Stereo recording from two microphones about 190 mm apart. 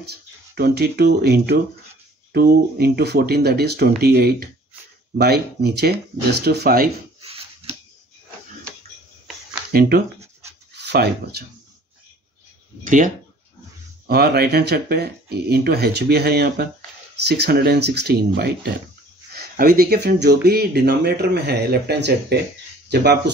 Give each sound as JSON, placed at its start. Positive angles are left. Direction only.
{"t": 0.0, "sound": "speech", "side_deg": -55}
{"t": 7.2, "sound": "a sound", "side_deg": -30}
{"t": 9.7, "sound": "speech", "side_deg": -55}
{"t": 12.8, "sound": "speech", "side_deg": -45}
{"t": 14.0, "sound": "speech", "side_deg": -55}